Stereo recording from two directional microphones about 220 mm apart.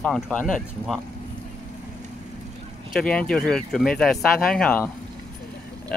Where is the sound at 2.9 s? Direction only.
5° left (ahead or behind).